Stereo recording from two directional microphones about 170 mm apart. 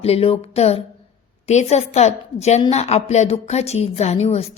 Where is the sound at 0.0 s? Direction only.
35° left (ahead or behind).